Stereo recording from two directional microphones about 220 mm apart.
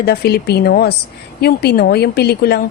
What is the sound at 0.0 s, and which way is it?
A woman's voice, 45° left (ahead or behind).